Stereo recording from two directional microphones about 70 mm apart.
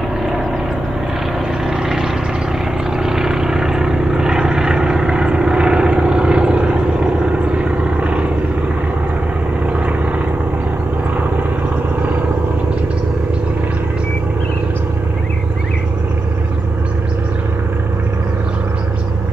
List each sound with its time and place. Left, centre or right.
1.7 s vehicle: centre